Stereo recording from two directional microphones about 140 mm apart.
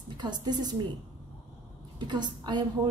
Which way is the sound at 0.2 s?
30° right (ahead or behind).